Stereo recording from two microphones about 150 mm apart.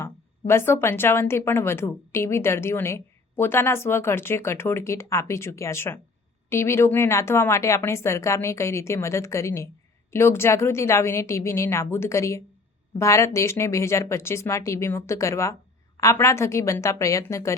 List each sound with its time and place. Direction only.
0.0 s a woman's voice: 15° left (ahead or behind)